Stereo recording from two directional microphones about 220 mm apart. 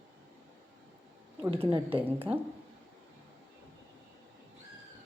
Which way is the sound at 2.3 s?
5° right (ahead or behind).